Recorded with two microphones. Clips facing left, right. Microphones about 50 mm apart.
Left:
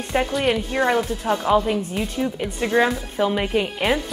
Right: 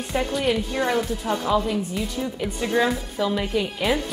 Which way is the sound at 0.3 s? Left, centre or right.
Centre.